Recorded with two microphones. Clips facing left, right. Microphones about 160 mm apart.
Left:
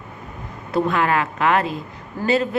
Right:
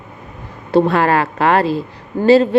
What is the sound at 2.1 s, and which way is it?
Speech, 55° right (ahead or behind).